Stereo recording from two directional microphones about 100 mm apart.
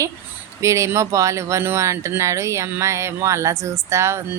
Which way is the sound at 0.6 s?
30° right (ahead or behind).